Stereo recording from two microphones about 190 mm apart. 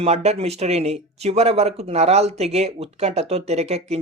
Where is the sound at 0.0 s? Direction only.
35° right (ahead or behind).